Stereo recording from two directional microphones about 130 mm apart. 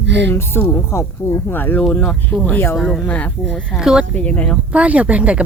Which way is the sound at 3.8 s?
5° right (ahead or behind).